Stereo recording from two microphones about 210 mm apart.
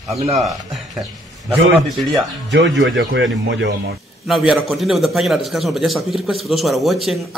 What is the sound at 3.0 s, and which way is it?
Speech, 65° right (ahead or behind).